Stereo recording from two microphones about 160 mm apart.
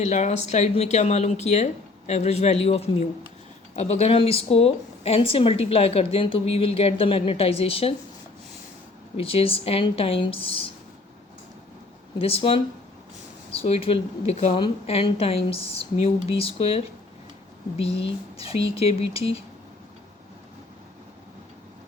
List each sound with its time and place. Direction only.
0.0 s speech: 45° left (ahead or behind)
9.1 s speech: 35° left (ahead or behind)
12.2 s speech: 35° left (ahead or behind)